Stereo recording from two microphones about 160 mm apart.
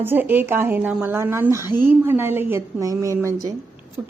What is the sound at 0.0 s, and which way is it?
A woman's voice, 10° right (ahead or behind).